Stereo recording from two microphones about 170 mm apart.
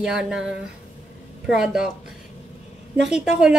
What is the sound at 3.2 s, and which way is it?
Speech, 5° right (ahead or behind).